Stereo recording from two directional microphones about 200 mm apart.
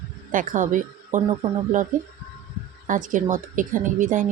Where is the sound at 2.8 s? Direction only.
40° right (ahead or behind).